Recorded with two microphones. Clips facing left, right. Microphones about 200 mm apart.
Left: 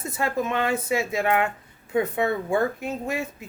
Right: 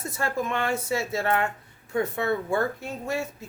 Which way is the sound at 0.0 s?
20° left (ahead or behind).